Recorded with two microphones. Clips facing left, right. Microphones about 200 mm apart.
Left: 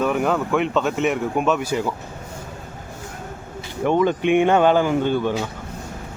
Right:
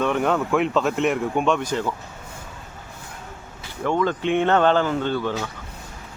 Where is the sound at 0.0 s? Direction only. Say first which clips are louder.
Left 1 dB; 5° left (ahead or behind).